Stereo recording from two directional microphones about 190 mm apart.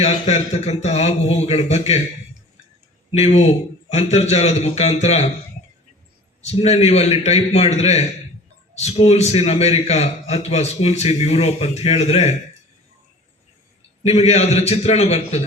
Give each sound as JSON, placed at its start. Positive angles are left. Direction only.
{"t": 0.0, "sound": "a man's voice", "side_deg": 35}
{"t": 3.2, "sound": "a man's voice", "side_deg": 35}
{"t": 6.4, "sound": "a man's voice", "side_deg": 35}
{"t": 14.0, "sound": "a man's voice", "side_deg": 35}